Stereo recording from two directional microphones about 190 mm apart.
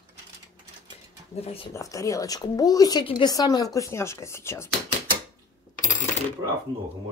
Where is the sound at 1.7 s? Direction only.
15° left (ahead or behind).